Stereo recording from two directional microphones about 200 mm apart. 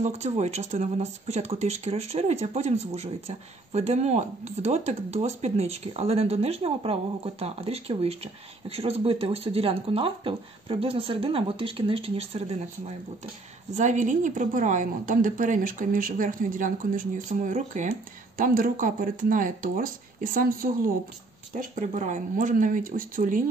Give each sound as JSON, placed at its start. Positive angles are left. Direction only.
{"t": 0.0, "sound": "speech", "side_deg": -35}